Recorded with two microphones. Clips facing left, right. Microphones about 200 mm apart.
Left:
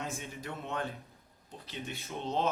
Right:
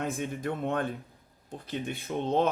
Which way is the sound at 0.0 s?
55° right (ahead or behind).